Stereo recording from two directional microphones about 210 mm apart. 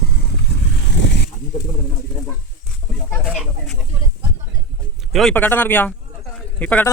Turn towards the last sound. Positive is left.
turn(degrees=10)  # may be behind; listen again after turning